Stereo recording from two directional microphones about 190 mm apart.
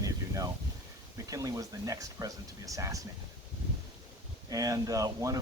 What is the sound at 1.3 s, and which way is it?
Speech, 20° right (ahead or behind).